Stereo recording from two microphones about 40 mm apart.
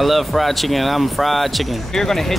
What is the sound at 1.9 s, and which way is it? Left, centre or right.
Speech, centre.